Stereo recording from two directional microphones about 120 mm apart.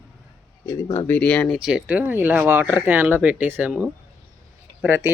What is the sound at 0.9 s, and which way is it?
Speech, 15° left (ahead or behind).